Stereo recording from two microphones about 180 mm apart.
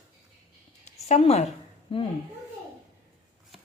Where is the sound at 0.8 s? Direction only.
40° left (ahead or behind).